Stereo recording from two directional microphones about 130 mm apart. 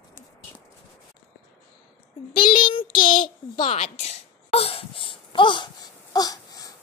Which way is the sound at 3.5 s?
45° left (ahead or behind).